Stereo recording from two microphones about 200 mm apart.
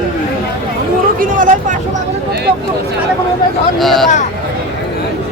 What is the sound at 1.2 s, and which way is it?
Vehicle, 40° right (ahead or behind).